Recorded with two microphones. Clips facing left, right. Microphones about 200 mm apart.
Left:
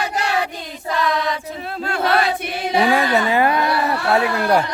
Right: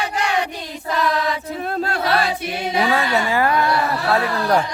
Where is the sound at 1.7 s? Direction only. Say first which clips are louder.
Left 1 dB; 35° right (ahead or behind).